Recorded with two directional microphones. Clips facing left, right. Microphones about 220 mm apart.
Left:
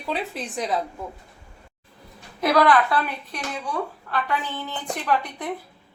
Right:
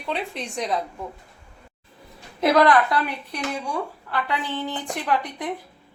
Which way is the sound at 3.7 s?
10° right (ahead or behind).